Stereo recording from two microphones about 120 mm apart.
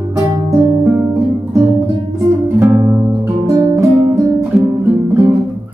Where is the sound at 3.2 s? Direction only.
30° right (ahead or behind).